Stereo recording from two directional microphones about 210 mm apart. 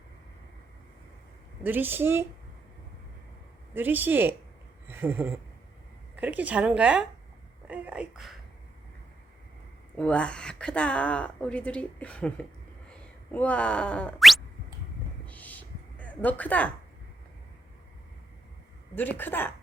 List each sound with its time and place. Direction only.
1.6 s a woman's voice: 10° right (ahead or behind)
3.8 s a woman's voice: 10° right (ahead or behind)
4.9 s a sound: 10° right (ahead or behind)
6.1 s a woman's voice: 5° right (ahead or behind)
10.0 s a woman's voice: 5° left (ahead or behind)
12.9 s a sound: 5° left (ahead or behind)
18.9 s speech: 10° left (ahead or behind)